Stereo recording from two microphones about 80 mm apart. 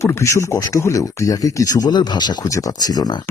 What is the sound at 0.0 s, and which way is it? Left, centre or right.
Speech, left.